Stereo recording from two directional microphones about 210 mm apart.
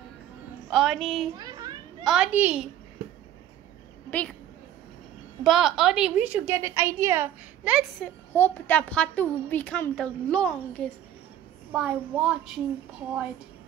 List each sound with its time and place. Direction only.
0.7 s a child's voice: centre (ahead or behind)
1.3 s a sound: 20° right (ahead or behind)
2.0 s a child's voice: 5° right (ahead or behind)
5.4 s a woman's voice: centre (ahead or behind)
8.0 s a woman's voice: 10° left (ahead or behind)